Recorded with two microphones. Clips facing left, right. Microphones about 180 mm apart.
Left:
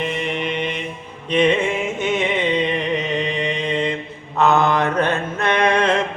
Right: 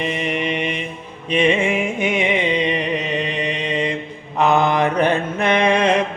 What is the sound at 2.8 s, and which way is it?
Music, 65° right (ahead or behind).